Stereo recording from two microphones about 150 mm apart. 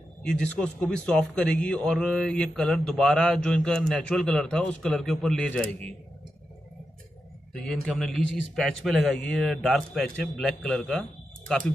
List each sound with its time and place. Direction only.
0.2 s a man's voice: 5° left (ahead or behind)
7.5 s a man's voice: 5° left (ahead or behind)